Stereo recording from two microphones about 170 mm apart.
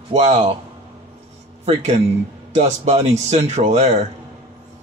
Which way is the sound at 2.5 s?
40° right (ahead or behind).